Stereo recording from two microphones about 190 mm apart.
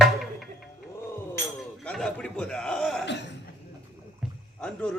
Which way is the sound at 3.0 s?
65° left (ahead or behind).